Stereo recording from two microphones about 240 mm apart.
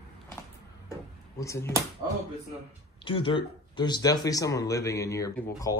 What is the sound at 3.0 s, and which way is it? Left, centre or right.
Speech, left.